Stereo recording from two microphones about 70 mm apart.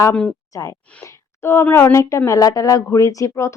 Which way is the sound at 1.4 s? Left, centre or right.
Left.